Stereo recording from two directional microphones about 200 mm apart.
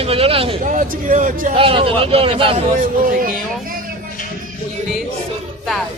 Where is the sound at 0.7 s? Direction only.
40° right (ahead or behind).